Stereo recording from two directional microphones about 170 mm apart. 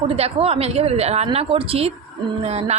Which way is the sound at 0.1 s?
35° right (ahead or behind).